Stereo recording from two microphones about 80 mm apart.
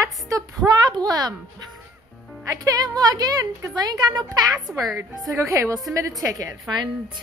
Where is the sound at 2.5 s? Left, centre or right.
Right.